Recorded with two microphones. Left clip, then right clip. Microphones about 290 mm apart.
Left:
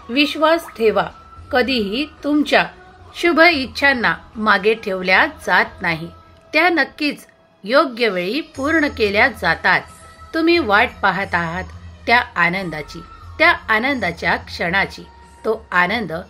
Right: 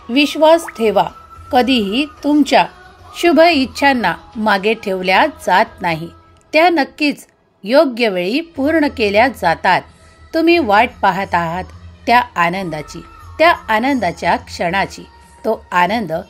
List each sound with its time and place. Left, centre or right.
0.1 s a woman's voice: right